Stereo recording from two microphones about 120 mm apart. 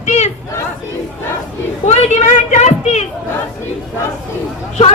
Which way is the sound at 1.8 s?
65° left (ahead or behind).